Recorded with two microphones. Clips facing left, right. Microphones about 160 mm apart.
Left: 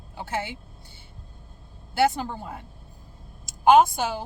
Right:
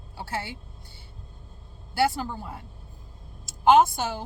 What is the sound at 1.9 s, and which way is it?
Speech, 20° left (ahead or behind).